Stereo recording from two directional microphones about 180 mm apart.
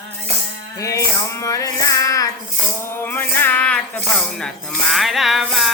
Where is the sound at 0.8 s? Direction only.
15° left (ahead or behind).